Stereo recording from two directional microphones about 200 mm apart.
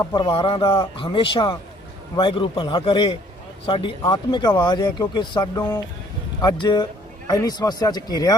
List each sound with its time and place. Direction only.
0.0 s speech: 20° left (ahead or behind)